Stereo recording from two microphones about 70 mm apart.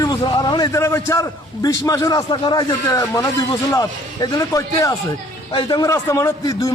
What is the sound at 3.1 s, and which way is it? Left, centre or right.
A man's voice, left.